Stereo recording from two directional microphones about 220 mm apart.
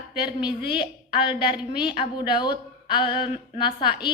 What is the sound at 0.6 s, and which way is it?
Speech, 5° right (ahead or behind).